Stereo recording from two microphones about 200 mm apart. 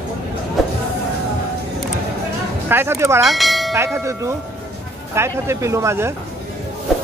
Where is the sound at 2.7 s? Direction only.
10° right (ahead or behind).